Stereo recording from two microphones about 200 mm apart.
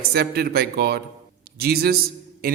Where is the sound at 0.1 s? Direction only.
50° right (ahead or behind).